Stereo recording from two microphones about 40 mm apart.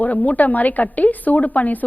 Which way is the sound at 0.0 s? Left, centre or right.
Left.